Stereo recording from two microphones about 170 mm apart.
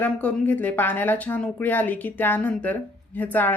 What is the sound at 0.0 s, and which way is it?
A woman's voice, 10° left (ahead or behind).